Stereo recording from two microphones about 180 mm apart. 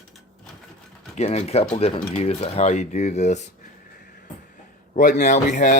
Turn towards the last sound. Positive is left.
turn(degrees=45)  # may be behind; listen again after turning